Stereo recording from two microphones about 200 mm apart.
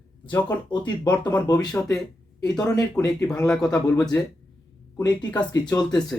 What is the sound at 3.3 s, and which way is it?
Speech, 5° left (ahead or behind).